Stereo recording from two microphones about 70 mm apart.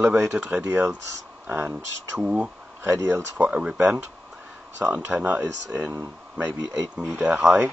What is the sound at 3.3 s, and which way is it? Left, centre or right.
Speech, right.